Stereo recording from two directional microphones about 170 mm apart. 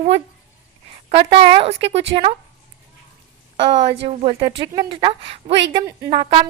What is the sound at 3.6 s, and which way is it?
A woman's voice, 30° right (ahead or behind).